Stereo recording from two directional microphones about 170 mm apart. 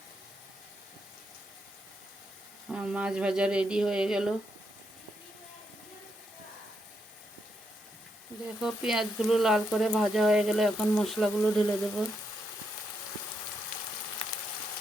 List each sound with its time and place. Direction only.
2.6 s speech: 5° right (ahead or behind)
8.6 s speech: 5° right (ahead or behind)